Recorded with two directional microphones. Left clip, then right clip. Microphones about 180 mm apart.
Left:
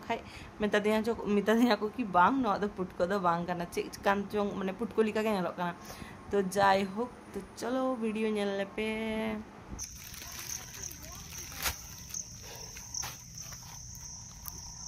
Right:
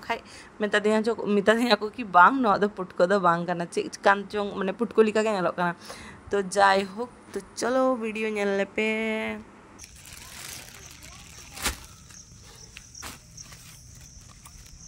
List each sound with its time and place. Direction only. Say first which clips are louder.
0.0 s speech: right 5 dB; 35° right (ahead or behind)
1.4 s speech: right 6 dB; 40° right (ahead or behind)